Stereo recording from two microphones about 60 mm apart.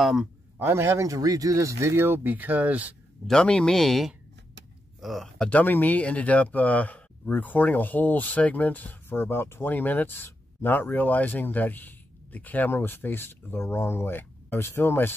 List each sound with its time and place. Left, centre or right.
0.0 s a man's voice: centre
0.6 s a man's voice: right
1.0 s speech: right
2.2 s speech: right
3.3 s speech: centre
5.4 s speech: left